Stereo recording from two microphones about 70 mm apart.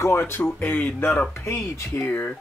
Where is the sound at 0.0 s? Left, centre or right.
Left.